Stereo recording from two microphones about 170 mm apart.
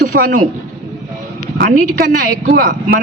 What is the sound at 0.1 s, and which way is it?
Speech, 60° right (ahead or behind).